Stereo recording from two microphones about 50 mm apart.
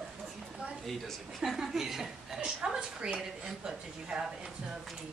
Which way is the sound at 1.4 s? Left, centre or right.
Centre.